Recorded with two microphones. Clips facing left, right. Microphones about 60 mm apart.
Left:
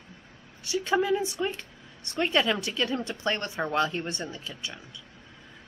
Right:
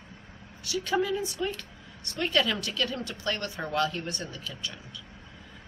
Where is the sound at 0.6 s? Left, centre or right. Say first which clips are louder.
Left 2 dB; left.